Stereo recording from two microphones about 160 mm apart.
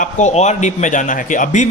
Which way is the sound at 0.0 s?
45° left (ahead or behind).